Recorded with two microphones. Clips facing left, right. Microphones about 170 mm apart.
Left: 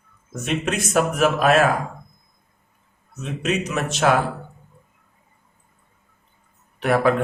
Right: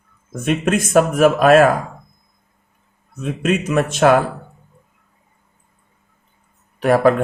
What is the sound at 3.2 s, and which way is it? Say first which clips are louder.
Speech: right 5 dB; 50° right (ahead or behind).